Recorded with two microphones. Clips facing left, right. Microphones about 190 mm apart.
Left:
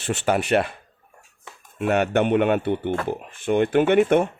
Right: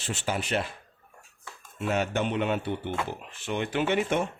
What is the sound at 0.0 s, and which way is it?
Speech, 65° left (ahead or behind).